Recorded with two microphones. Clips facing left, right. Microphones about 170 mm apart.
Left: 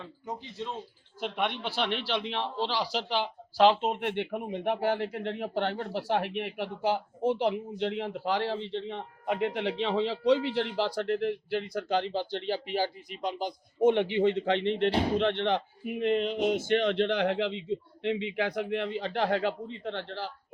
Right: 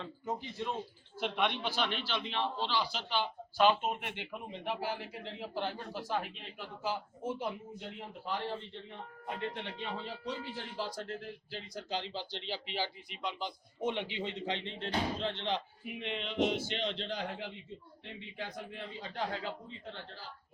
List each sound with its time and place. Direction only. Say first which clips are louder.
0.0 s speech: right 1 dB; 20° left (ahead or behind)
1.2 s a man's voice: left 2 dB; 50° left (ahead or behind); by 20.3 s 75° left (ahead or behind)